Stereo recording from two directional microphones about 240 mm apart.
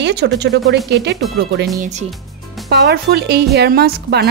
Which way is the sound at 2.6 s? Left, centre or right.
Right.